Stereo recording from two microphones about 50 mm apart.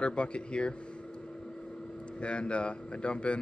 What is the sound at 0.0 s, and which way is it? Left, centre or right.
Speech, left.